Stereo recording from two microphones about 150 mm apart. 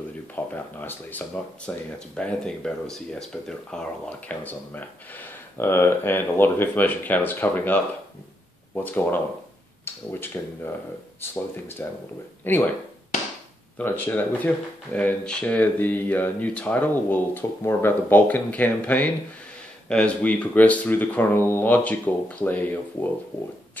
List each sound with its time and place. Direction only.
0.5 s speech: 10° left (ahead or behind)
10.2 s speech: 15° left (ahead or behind)
13.7 s speech: 15° left (ahead or behind)